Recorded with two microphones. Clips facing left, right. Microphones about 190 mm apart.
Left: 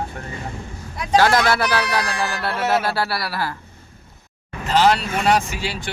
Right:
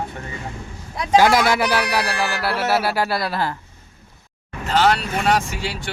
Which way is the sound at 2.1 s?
70° right (ahead or behind).